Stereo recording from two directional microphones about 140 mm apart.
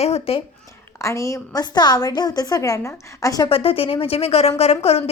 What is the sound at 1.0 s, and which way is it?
A woman's voice, 20° left (ahead or behind).